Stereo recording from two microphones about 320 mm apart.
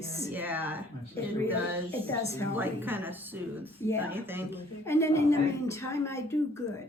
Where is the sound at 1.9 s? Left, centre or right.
Centre.